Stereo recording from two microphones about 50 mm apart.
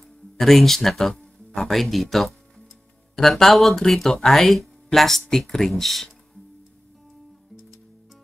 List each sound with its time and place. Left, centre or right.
0.4 s speech: centre